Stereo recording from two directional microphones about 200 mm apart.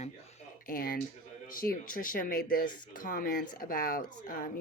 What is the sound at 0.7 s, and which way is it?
Speech, 45° left (ahead or behind).